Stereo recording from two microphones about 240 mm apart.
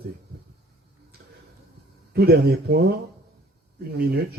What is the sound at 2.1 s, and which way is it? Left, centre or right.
Speech, right.